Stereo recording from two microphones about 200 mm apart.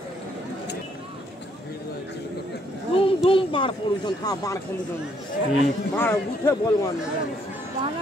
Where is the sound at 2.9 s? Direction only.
25° left (ahead or behind).